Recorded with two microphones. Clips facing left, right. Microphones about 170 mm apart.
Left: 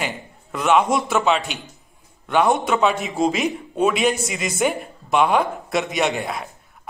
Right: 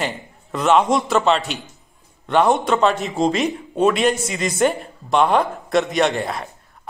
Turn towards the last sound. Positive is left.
turn(degrees=0)  # may be behind; listen again after turning